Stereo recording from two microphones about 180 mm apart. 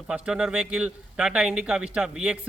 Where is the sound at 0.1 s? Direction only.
5° right (ahead or behind).